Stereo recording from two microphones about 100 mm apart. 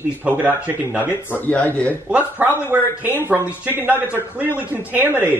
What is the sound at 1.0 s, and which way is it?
Speech, 20° left (ahead or behind).